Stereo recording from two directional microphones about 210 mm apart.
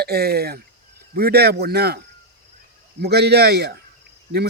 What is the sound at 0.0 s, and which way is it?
Speech, 50° right (ahead or behind).